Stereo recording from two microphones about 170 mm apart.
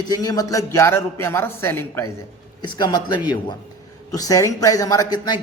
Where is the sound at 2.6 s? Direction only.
25° left (ahead or behind).